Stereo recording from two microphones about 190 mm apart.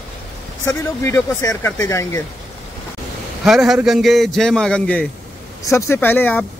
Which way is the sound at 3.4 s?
Centre (ahead or behind).